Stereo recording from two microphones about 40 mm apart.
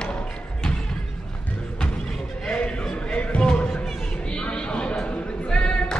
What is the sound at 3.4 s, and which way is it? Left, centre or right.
Music, centre.